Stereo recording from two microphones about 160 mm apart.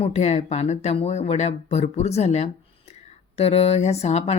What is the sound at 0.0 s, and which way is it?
Speech, 45° left (ahead or behind).